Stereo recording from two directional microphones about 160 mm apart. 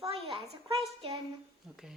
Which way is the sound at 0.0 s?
35° right (ahead or behind).